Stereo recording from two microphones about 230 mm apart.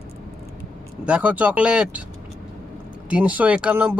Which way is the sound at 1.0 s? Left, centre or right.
Centre.